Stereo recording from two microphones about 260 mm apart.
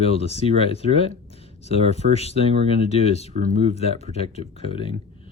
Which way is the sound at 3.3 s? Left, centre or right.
Right.